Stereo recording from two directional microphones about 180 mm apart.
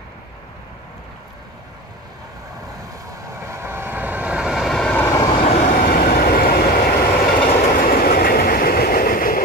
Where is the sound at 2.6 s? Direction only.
20° right (ahead or behind); by 5.0 s 5° left (ahead or behind).